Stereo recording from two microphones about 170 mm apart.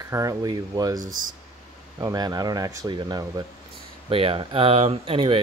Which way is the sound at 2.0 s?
20° right (ahead or behind).